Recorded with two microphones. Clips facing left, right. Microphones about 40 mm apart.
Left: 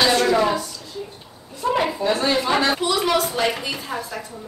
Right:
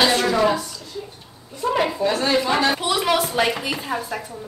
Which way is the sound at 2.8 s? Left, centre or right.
Centre.